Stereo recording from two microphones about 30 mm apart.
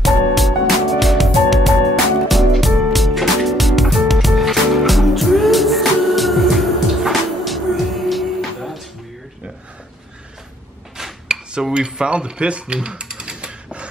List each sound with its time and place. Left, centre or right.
0.0 s music: centre
11.2 s speech: right
13.4 s a sound: right